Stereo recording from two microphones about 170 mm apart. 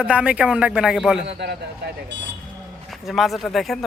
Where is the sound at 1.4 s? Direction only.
80° right.